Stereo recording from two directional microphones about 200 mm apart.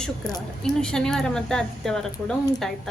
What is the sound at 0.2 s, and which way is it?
A woman's voice, centre (ahead or behind).